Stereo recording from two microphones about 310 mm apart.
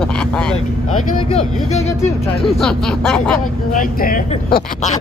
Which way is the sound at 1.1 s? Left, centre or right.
Centre.